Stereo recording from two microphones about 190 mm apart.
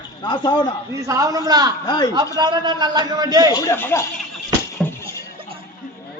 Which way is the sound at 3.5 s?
15° left (ahead or behind).